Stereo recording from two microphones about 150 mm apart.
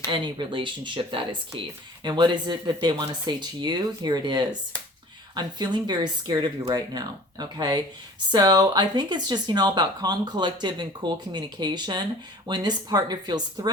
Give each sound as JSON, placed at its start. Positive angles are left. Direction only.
{"t": 0.1, "sound": "speech", "side_deg": -30}